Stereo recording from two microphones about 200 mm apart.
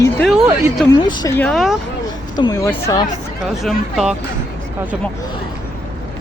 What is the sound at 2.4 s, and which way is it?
Speech, 20° left (ahead or behind).